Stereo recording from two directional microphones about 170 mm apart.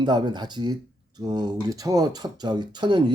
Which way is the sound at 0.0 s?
25° right (ahead or behind).